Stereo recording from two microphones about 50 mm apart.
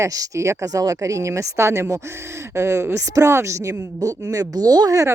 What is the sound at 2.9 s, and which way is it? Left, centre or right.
Speech, right.